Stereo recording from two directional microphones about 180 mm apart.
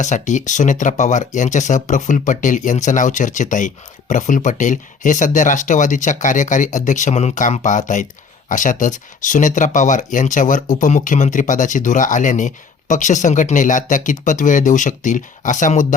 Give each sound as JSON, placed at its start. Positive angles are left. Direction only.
{"t": 0.0, "sound": "speech", "side_deg": 45}